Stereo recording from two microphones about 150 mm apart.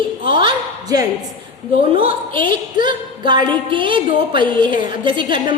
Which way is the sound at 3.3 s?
30° right (ahead or behind).